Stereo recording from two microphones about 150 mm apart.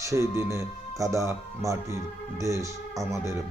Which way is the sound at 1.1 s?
20° right (ahead or behind).